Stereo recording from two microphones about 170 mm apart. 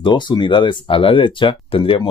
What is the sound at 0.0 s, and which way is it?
Speech, 25° left (ahead or behind).